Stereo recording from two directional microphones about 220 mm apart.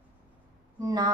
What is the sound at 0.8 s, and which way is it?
Music, 15° right (ahead or behind).